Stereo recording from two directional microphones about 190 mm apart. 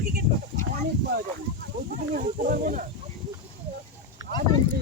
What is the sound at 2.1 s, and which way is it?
Speech, 45° right (ahead or behind).